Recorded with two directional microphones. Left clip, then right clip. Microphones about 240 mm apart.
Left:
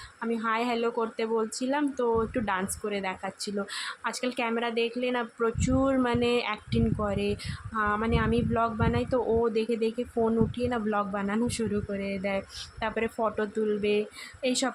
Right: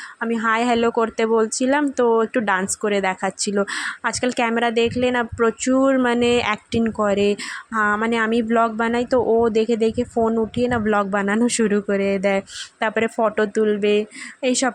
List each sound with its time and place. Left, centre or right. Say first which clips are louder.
0.2 s speech: right 9 dB; right